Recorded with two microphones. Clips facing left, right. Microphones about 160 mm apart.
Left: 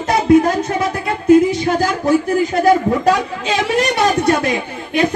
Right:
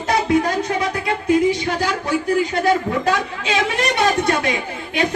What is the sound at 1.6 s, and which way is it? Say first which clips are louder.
Music: left 6 dB; 45° left (ahead or behind).